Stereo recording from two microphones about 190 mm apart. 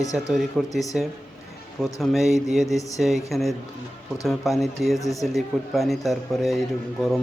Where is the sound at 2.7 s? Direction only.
15° left (ahead or behind).